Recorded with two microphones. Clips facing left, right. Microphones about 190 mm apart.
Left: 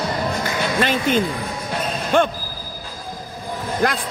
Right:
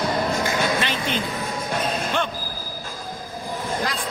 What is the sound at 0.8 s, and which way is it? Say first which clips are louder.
Speech: left 7 dB; 45° left (ahead or behind).